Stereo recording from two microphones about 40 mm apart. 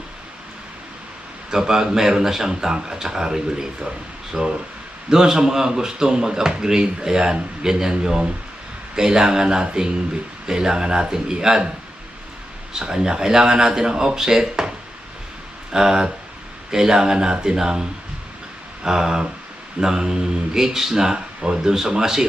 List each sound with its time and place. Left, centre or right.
1.5 s speech: centre
12.8 s speech: centre
15.7 s speech: centre